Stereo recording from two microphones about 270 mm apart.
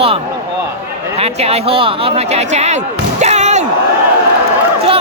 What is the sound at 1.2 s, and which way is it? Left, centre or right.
Speech, right.